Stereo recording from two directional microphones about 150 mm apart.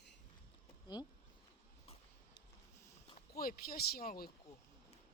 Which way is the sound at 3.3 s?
80° left.